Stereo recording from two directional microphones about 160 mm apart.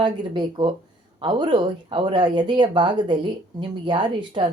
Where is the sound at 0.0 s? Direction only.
30° right (ahead or behind).